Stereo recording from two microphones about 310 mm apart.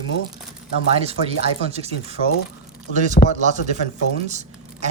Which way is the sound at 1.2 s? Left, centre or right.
Left.